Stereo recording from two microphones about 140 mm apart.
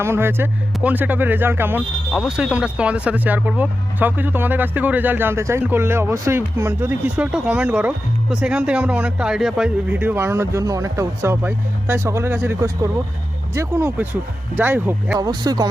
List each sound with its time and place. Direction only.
0.0 s speech: 15° right (ahead or behind)
2.1 s speech: 5° right (ahead or behind)
15.2 s speech: 30° right (ahead or behind)